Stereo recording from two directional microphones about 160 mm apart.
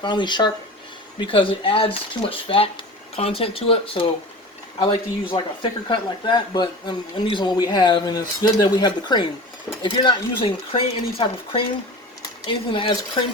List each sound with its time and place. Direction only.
0.0 s speech: 30° left (ahead or behind)